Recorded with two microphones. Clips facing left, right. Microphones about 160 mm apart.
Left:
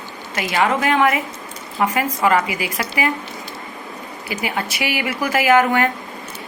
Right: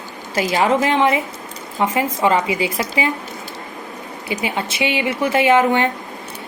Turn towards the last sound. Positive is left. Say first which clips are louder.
# right 1 dB
turn(degrees=-25)  # may be behind; listen again after turning